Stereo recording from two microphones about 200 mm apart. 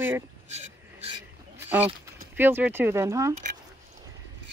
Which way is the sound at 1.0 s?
30° right (ahead or behind).